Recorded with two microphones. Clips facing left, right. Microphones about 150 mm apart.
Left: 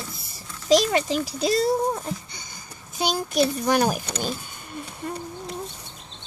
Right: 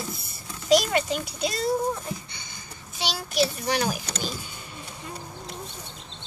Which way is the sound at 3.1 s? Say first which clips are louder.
Left 3 dB; 45° left (ahead or behind).